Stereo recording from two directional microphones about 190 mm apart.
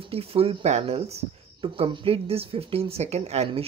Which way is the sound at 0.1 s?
30° right (ahead or behind).